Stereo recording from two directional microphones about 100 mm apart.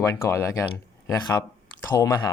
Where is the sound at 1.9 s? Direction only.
30° left (ahead or behind).